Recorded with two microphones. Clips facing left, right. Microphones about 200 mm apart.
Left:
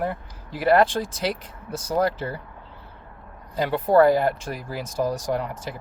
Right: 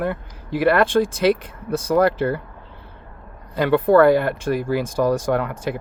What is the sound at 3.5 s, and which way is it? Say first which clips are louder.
Speech: right 4 dB; 65° right (ahead or behind).